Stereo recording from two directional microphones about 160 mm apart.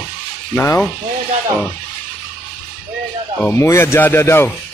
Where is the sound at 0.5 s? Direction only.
15° left (ahead or behind).